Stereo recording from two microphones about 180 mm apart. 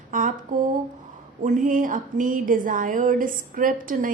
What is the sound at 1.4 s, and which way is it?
A woman's voice, 45° right (ahead or behind).